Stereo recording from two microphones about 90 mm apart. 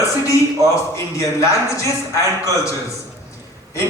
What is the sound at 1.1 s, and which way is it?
A man's voice, 35° left (ahead or behind).